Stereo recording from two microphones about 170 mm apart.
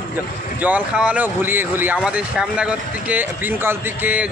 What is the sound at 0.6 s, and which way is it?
Speech, 10° right (ahead or behind).